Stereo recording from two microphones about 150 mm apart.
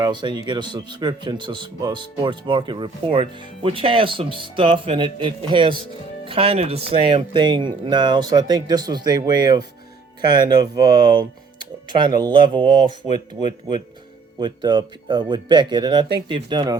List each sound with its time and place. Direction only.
0.0 s a man's voice: 30° right (ahead or behind)